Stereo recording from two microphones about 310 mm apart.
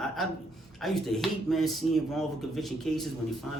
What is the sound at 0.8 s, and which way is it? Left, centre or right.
Speech, centre.